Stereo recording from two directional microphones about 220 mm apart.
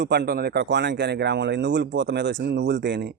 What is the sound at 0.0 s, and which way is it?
Speech, 50° right (ahead or behind).